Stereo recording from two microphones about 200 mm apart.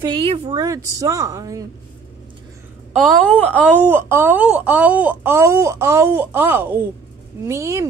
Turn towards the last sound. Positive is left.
turn(degrees=-15)  # may be behind; listen again after turning